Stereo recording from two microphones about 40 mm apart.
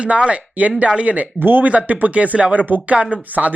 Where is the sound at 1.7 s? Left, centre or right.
Right.